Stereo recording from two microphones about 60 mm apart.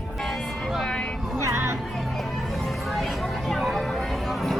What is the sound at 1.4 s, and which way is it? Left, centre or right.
Music, right.